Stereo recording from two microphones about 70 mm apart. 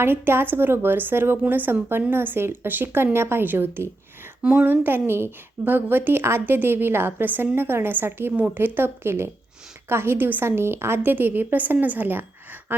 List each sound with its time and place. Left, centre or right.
0.0 s a woman's voice: right